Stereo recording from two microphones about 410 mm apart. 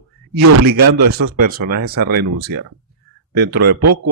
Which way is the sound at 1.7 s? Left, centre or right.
Right.